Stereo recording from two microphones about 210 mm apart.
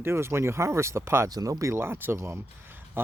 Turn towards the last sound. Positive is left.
turn(degrees=-10)  # may be behind; listen again after turning